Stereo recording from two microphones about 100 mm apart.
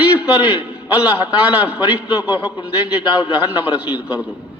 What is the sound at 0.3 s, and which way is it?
A man's voice, 20° right (ahead or behind).